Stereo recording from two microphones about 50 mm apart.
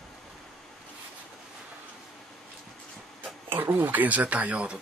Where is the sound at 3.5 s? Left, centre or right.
Right.